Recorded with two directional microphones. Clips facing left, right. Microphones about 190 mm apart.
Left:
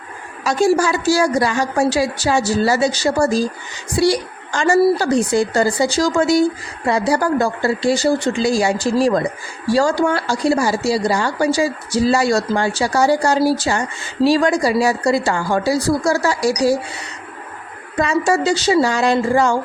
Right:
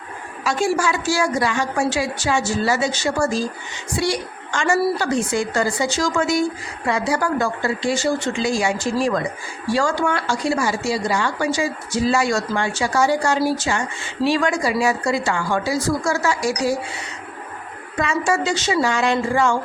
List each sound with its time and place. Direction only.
0.4 s a woman's voice: 40° left (ahead or behind)
17.9 s a woman's voice: 35° left (ahead or behind)